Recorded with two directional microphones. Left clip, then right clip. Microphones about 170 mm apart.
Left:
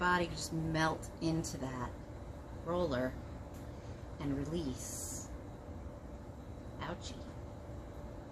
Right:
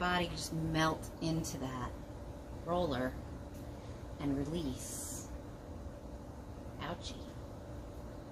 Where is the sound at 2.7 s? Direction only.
15° left (ahead or behind).